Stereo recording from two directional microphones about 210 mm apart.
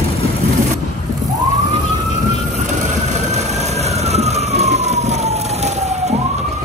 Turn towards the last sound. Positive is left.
turn(degrees=-30)  # may be behind; listen again after turning